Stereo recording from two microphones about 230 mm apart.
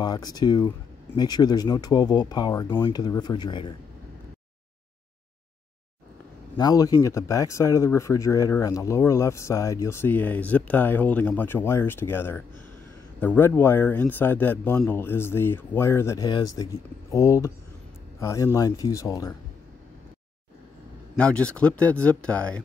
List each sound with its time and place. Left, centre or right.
0.0 s speech: centre
6.5 s speech: centre
21.2 s speech: centre